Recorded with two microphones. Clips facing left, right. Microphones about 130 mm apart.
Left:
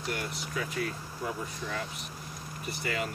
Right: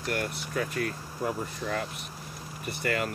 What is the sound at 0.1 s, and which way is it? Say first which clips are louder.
Speech: right 5 dB; 50° right (ahead or behind).